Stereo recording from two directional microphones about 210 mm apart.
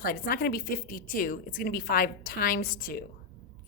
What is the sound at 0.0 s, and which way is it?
A woman's voice, 40° left (ahead or behind).